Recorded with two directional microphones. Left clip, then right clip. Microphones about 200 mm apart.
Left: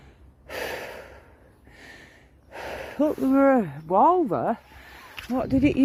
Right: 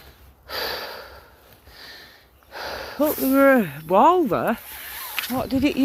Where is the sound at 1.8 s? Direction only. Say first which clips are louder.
Right 4 dB; 45° left (ahead or behind).